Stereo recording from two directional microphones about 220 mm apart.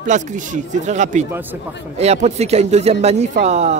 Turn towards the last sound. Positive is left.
turn(degrees=-30)  # may be behind; listen again after turning